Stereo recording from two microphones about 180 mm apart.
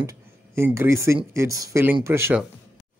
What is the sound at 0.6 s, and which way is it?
Speech, 15° right (ahead or behind).